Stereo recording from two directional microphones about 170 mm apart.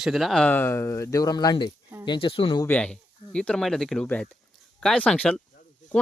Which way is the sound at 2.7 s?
5° left (ahead or behind).